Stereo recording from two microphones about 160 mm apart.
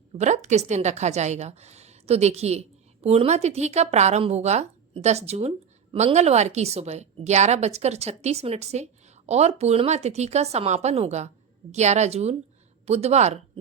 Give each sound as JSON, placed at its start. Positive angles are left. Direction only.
{"t": 0.2, "sound": "a woman's voice", "side_deg": -45}